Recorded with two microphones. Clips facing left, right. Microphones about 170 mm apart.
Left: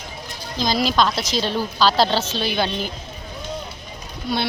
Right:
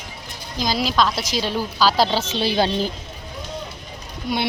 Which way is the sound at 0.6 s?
5° right (ahead or behind).